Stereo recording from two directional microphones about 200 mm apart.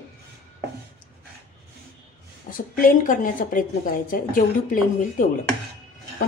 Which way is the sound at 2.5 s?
45° left (ahead or behind).